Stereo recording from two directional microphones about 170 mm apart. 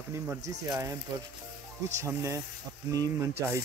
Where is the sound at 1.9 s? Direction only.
15° right (ahead or behind).